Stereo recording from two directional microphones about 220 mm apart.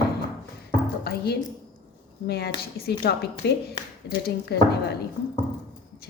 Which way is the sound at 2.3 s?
45° left (ahead or behind).